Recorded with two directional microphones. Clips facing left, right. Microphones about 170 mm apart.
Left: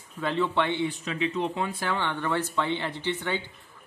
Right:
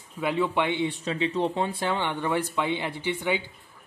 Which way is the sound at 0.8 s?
30° right (ahead or behind).